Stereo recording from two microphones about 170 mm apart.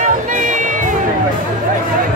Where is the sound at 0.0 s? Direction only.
50° right (ahead or behind).